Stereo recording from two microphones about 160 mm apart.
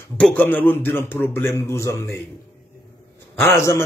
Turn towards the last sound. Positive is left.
turn(degrees=15)  # may be behind; listen again after turning